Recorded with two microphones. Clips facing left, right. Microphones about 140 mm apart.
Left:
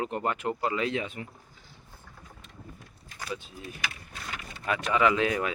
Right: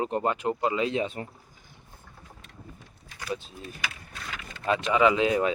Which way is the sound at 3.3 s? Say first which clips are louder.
Right 4 dB; 30° right (ahead or behind).